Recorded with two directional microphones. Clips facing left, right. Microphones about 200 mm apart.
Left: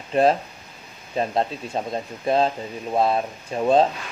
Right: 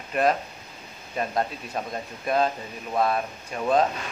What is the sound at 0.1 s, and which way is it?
Speech, 30° left (ahead or behind).